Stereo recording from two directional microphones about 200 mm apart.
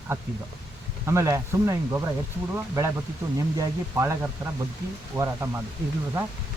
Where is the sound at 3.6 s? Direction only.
15° right (ahead or behind).